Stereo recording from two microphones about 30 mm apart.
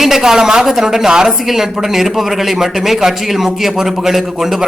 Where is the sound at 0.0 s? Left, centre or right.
Centre.